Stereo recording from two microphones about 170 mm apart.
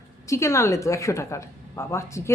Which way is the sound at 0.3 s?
15° left (ahead or behind).